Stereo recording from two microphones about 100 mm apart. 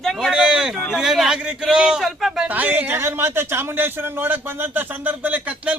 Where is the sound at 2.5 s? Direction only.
15° right (ahead or behind).